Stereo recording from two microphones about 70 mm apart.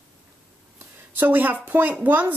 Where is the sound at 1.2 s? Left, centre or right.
Right.